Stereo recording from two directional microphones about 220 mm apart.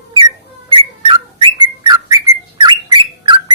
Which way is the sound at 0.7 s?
25° right (ahead or behind).